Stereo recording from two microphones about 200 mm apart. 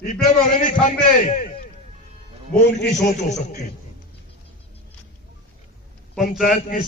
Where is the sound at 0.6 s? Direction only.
40° left (ahead or behind).